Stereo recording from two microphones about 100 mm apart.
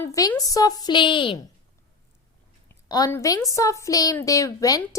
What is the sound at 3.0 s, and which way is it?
A woman's voice, 40° left (ahead or behind).